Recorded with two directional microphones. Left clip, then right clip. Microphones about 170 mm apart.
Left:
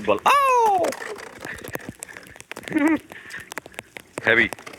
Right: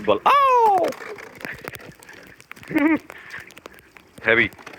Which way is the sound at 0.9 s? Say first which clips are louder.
Left 2 dB; 20° right (ahead or behind).